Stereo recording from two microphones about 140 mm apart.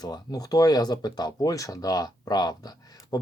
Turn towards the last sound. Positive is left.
turn(degrees=30)  # may be behind; listen again after turning